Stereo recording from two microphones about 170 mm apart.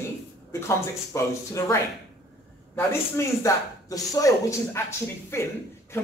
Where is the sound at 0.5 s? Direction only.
15° left (ahead or behind).